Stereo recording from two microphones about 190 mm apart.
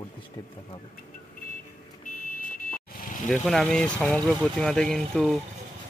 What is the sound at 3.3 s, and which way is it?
Speech, 5° left (ahead or behind).